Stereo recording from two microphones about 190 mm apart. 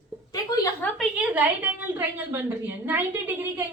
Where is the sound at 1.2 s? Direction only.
10° right (ahead or behind).